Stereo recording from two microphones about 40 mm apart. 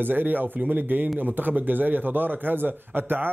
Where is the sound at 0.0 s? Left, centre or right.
Right.